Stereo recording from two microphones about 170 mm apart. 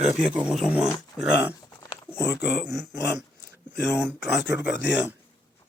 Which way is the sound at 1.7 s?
25° left (ahead or behind).